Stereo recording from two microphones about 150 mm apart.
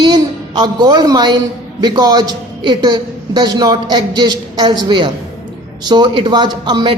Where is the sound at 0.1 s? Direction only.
25° right (ahead or behind).